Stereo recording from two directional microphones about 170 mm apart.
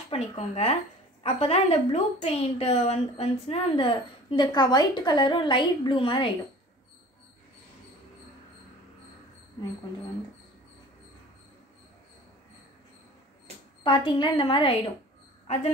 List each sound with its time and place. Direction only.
0.1 s a woman's voice: 40° left (ahead or behind)
13.8 s a woman's voice: 30° left (ahead or behind)